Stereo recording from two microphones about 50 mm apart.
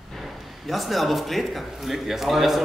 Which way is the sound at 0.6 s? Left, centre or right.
Centre.